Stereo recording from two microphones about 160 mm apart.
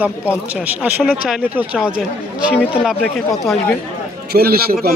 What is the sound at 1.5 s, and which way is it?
Speech, 10° right (ahead or behind).